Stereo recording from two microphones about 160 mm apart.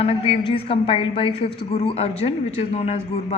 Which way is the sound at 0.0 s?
35° left (ahead or behind).